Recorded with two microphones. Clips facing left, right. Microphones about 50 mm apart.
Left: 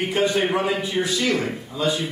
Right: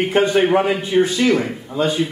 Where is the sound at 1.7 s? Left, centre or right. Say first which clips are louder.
Right 4 dB; right.